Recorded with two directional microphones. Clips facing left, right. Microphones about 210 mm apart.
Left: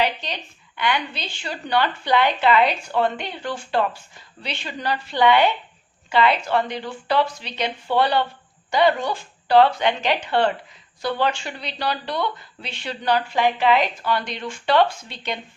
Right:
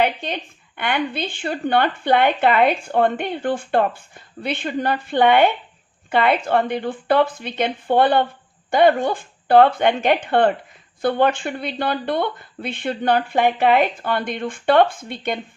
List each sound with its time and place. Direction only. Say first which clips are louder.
0.0 s a woman's voice: right 3 dB; 55° right (ahead or behind)